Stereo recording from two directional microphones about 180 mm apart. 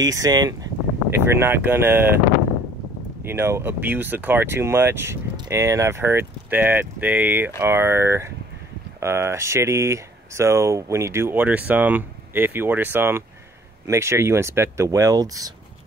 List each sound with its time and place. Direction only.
0.0 s speech: 20° right (ahead or behind)
3.3 s speech: 15° right (ahead or behind)